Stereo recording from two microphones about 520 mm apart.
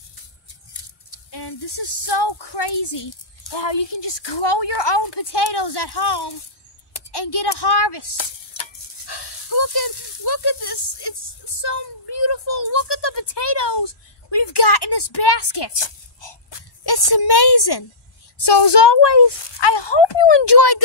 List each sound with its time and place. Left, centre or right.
1.3 s speech: left